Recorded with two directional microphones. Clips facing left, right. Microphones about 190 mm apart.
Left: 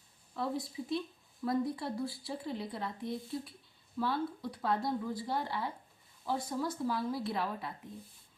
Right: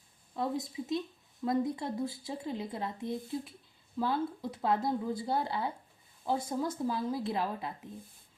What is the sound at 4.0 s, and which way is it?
Speech, 20° right (ahead or behind).